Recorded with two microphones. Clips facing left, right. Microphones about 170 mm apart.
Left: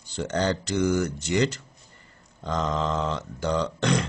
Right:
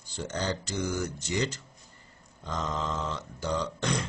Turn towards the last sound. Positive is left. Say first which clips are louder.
# left 6 dB
turn(degrees=70)  # may be behind; listen again after turning